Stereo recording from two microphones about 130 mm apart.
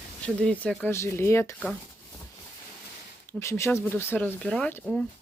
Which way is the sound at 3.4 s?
20° left (ahead or behind).